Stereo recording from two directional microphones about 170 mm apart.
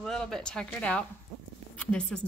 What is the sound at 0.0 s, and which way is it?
Speech, centre (ahead or behind).